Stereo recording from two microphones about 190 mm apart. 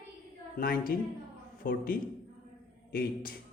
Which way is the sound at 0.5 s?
50° left (ahead or behind).